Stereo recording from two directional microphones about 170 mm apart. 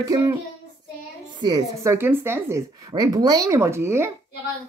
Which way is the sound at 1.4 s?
20° right (ahead or behind).